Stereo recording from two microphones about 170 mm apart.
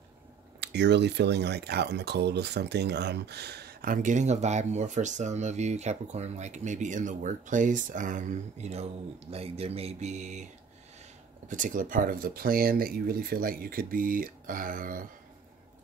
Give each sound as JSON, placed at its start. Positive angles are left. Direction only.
{"t": 0.6, "sound": "speech", "side_deg": -90}
{"t": 11.4, "sound": "speech", "side_deg": -50}